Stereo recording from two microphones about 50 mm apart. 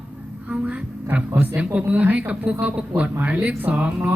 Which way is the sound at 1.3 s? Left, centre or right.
Right.